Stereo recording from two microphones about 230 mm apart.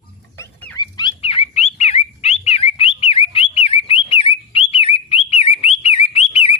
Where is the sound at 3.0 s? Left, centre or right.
Left.